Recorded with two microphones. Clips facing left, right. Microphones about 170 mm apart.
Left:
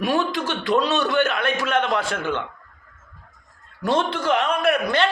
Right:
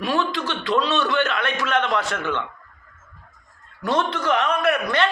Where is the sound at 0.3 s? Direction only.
45° left (ahead or behind).